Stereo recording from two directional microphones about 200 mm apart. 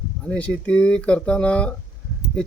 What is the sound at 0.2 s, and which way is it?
A man's voice, 5° left (ahead or behind).